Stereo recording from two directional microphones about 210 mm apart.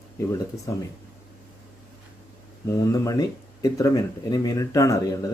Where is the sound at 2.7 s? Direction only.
15° left (ahead or behind).